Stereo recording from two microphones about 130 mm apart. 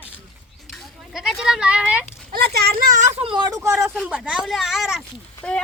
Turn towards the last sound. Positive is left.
turn(degrees=5)  # may be behind; listen again after turning